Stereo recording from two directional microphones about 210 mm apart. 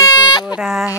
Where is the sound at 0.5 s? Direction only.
5° right (ahead or behind).